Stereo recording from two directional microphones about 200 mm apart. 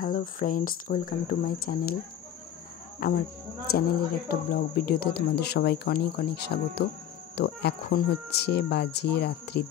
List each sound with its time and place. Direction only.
0.0 s speech: 40° left (ahead or behind)
3.0 s speech: 45° left (ahead or behind)
4.3 s speech: 50° left (ahead or behind)